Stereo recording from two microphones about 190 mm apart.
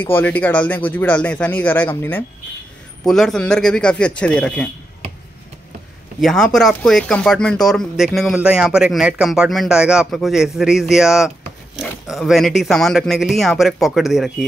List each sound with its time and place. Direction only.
0.0 s speech: 10° left (ahead or behind)
6.2 s speech: 5° left (ahead or behind)